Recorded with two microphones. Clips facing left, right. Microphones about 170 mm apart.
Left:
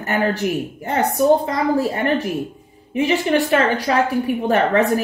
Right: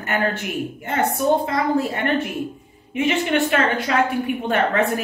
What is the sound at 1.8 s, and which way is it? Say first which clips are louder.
A woman's voice: left 2 dB; 35° left (ahead or behind).